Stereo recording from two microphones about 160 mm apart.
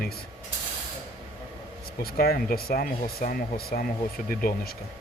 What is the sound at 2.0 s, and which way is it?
Speech, 70° left (ahead or behind).